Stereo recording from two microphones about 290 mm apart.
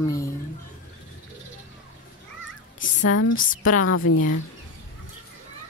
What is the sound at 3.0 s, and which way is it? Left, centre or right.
Speech, left.